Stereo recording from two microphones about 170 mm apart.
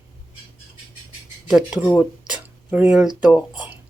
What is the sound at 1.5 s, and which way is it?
Speech, 5° right (ahead or behind).